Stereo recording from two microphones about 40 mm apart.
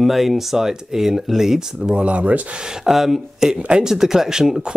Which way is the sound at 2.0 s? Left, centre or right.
Right.